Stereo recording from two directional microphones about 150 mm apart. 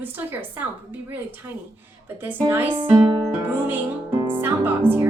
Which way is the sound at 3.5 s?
15° right (ahead or behind).